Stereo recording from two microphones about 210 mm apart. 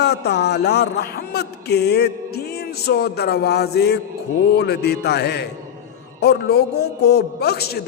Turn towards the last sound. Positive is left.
turn(degrees=50)  # may be behind; listen again after turning